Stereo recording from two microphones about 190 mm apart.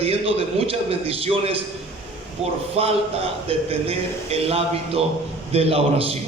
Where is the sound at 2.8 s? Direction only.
30° right (ahead or behind).